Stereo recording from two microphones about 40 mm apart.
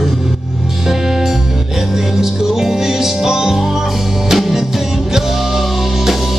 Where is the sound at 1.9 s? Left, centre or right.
Centre.